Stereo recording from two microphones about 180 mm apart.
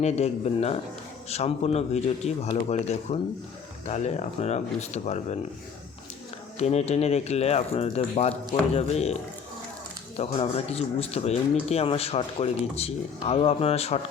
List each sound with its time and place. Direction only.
0.0 s speech: 35° left (ahead or behind)
6.6 s speech: 35° left (ahead or behind)
10.2 s speech: 35° left (ahead or behind)